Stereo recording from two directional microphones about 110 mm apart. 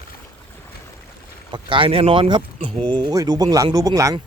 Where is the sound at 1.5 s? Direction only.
50° right (ahead or behind); by 4.2 s 30° right (ahead or behind).